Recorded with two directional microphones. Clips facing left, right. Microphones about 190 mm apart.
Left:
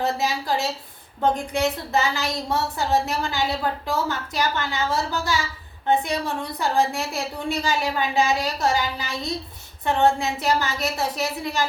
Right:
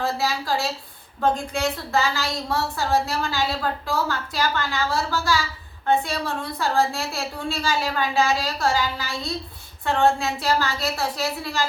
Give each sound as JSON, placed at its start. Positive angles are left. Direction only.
{"t": 0.0, "sound": "a woman's voice", "side_deg": 20}